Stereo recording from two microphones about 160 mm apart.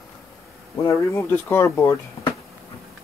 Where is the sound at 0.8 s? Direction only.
15° left (ahead or behind).